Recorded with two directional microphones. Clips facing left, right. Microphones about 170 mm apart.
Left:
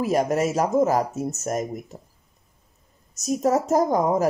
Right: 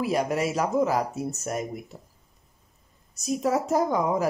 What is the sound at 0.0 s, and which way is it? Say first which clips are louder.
Speech: left 4 dB; 45° left (ahead or behind).